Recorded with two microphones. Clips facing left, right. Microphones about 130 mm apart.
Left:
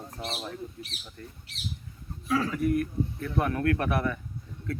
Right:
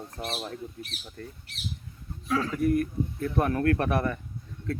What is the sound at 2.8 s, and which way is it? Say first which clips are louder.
Speech: right 1 dB; 35° right (ahead or behind).